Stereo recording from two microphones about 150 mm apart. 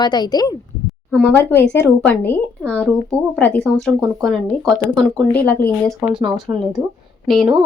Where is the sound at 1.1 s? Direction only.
10° left (ahead or behind).